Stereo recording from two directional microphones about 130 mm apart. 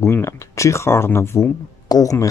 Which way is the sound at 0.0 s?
20° left (ahead or behind).